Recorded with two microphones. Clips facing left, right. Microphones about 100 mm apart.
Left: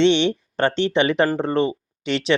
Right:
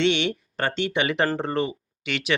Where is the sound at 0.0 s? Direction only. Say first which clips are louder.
Left 6 dB; 25° left (ahead or behind).